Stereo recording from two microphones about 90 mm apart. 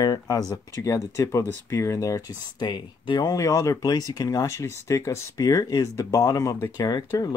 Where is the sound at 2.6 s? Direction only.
55° left (ahead or behind).